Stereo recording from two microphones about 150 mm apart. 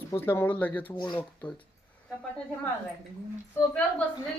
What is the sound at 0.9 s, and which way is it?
Speech, 30° left (ahead or behind).